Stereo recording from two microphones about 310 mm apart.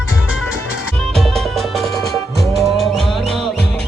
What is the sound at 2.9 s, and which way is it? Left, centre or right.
Music, centre.